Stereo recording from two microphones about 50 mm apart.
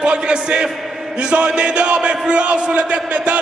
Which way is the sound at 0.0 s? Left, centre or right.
Centre.